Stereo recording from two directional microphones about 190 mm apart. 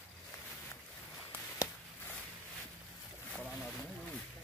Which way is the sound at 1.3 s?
10° left (ahead or behind).